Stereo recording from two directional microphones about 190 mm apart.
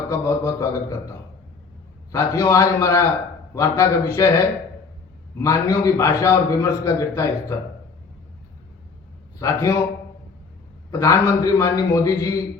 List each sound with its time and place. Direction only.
0.1 s a man's voice: 15° left (ahead or behind)
2.1 s a man's voice: 15° left (ahead or behind)
9.4 s a man's voice: 15° left (ahead or behind)
10.9 s a man's voice: 15° left (ahead or behind)